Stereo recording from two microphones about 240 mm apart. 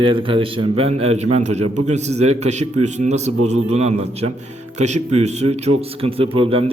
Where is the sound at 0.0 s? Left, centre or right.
Right.